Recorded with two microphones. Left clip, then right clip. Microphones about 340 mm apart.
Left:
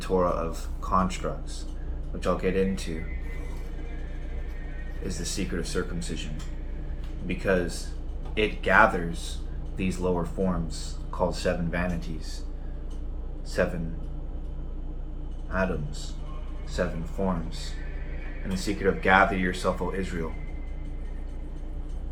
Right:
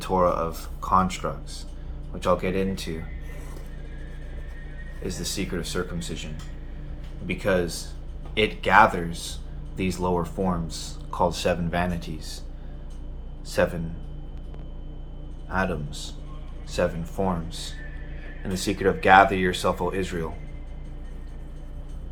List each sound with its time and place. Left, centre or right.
0.0 s speech: centre
5.0 s speech: centre
7.3 s speech: centre
13.6 s speech: centre
15.4 s speech: centre